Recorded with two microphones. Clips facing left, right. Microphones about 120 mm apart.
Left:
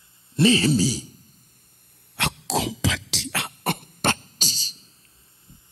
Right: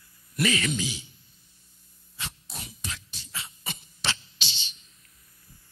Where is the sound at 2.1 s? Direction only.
75° left (ahead or behind); by 4.9 s 35° left (ahead or behind).